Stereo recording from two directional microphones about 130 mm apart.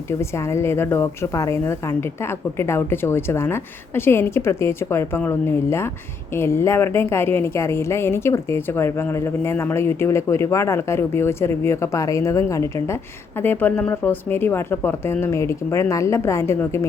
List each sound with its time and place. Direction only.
0.2 s a woman's voice: 20° left (ahead or behind)